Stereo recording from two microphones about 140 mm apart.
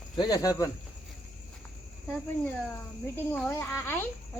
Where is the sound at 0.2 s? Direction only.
25° left (ahead or behind).